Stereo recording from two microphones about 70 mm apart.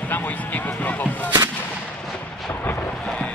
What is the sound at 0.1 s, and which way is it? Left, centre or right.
Artillery fire, left.